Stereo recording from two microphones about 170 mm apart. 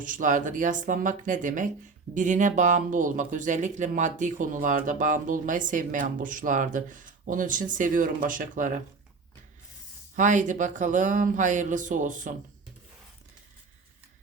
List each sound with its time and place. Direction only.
0.0 s speech: 50° right (ahead or behind)
10.2 s speech: 45° right (ahead or behind)